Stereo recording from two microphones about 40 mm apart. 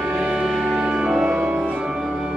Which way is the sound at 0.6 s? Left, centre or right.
Right.